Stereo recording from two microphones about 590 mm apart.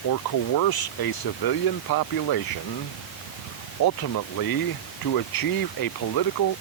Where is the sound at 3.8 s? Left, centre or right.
Left.